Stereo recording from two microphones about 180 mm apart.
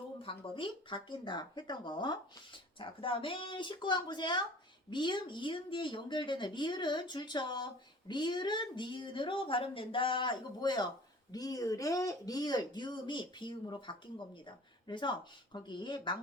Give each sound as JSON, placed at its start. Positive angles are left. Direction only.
{"t": 0.2, "sound": "speech", "side_deg": 30}